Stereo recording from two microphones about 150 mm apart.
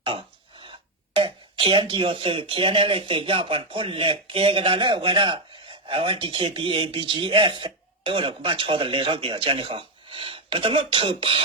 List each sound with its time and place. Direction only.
0.0 s speech: 35° right (ahead or behind)